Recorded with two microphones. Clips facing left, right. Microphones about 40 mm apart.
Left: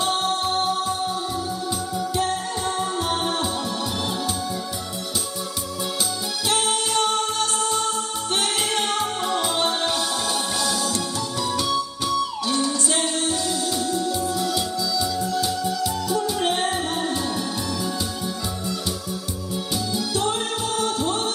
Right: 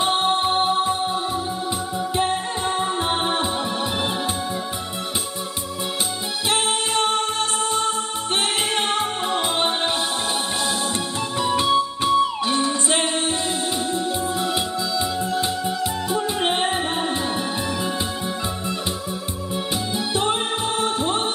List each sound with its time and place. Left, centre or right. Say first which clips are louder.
0.0 s music: right 3 dB; right
6.5 s music: right 1 dB; right
19.9 s music: right 2 dB; right